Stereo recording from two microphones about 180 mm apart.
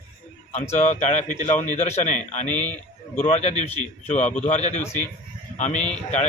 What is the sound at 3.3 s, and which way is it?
Speech, 40° left (ahead or behind).